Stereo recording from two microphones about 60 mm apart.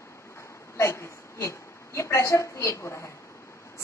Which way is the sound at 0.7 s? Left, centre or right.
Left.